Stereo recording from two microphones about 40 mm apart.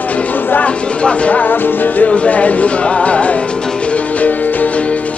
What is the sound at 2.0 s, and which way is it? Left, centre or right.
Music, left.